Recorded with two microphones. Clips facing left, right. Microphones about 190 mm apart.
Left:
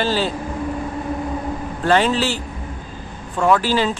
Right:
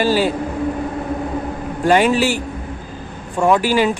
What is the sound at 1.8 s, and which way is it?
Speech, 15° right (ahead or behind).